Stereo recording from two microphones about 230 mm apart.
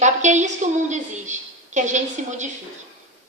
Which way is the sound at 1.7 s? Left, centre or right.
Right.